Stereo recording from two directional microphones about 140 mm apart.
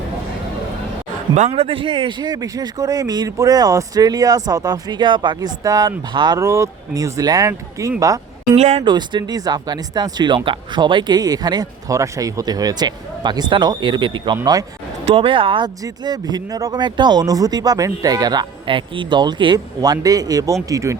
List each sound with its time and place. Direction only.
1.4 s speech: 40° right (ahead or behind); by 8.2 s 25° right (ahead or behind)
8.5 s speech: 50° right (ahead or behind)
8.8 s speech: 35° right (ahead or behind)